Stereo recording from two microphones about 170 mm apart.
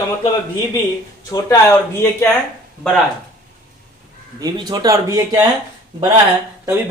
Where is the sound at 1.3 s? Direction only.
20° left (ahead or behind).